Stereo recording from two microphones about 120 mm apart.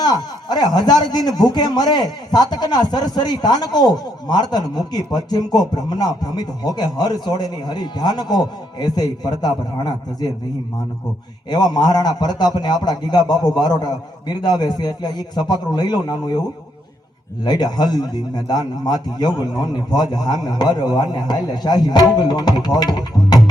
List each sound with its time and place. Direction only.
0.0 s speech: 35° left (ahead or behind)
11.4 s speech: 35° left (ahead or behind)
17.4 s speech: 35° left (ahead or behind)